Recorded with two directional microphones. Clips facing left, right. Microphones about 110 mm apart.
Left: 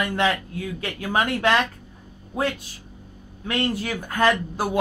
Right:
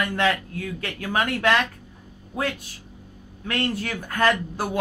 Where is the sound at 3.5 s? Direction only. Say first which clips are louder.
Left 2 dB; 15° left (ahead or behind).